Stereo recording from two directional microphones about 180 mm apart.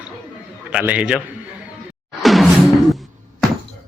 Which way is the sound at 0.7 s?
10° right (ahead or behind).